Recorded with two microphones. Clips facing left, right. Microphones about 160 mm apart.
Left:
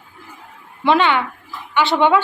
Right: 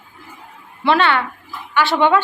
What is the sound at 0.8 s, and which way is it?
Speech, 15° left (ahead or behind).